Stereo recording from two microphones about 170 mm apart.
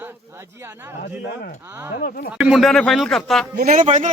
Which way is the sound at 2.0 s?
60° left (ahead or behind).